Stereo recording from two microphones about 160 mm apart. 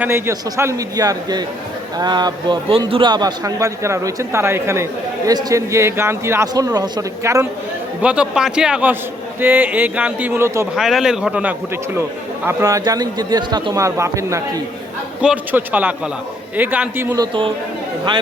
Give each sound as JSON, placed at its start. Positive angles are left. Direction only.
{"t": 0.0, "sound": "a man's voice", "side_deg": -15}
{"t": 8.0, "sound": "a man's voice", "side_deg": -5}
{"t": 10.8, "sound": "a man's voice", "side_deg": 0}
{"t": 15.2, "sound": "a man's voice", "side_deg": -10}
{"t": 17.2, "sound": "speech", "side_deg": -30}